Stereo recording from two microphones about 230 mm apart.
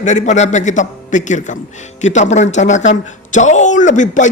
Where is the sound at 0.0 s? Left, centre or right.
Left.